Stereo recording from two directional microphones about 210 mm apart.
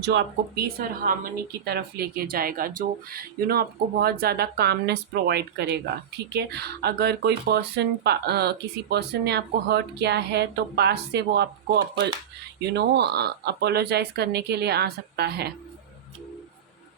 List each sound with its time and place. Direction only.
0.0 s speech: 55° right (ahead or behind)